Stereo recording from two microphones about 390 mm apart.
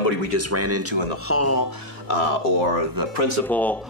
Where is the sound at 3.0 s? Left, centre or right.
Right.